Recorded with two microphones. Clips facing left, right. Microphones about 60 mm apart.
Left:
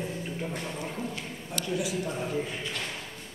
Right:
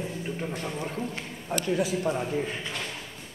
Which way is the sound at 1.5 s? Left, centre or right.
Right.